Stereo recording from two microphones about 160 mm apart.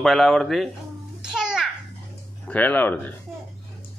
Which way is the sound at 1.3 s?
5° right (ahead or behind).